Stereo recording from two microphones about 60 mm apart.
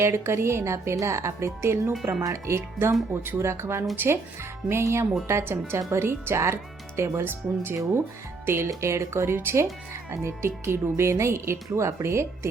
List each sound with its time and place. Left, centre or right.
0.0 s speech: right
3.9 s speech: right